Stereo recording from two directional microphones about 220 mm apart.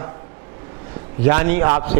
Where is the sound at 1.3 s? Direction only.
20° right (ahead or behind).